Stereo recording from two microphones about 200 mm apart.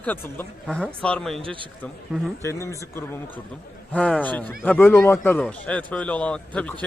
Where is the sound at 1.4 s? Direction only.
25° right (ahead or behind).